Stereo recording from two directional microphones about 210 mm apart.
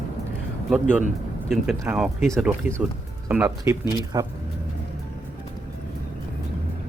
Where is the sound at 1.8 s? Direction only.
5° right (ahead or behind); by 4.3 s 20° right (ahead or behind).